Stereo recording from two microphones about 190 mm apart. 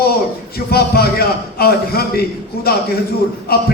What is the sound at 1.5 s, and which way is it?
Speech, 55° left (ahead or behind).